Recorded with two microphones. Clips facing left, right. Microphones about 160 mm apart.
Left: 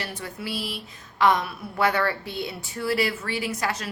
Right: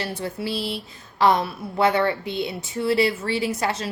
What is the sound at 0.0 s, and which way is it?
A woman's voice, 30° right (ahead or behind).